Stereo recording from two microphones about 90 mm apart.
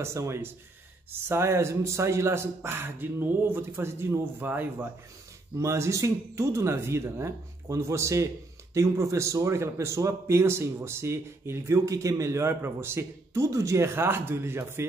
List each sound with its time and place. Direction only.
0.0 s a man's voice: 30° right (ahead or behind)
5.6 s a man's voice: 35° right (ahead or behind)